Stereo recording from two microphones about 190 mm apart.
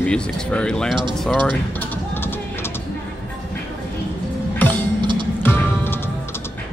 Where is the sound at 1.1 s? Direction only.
5° left (ahead or behind).